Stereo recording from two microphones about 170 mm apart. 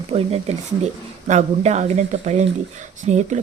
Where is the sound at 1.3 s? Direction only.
40° right (ahead or behind).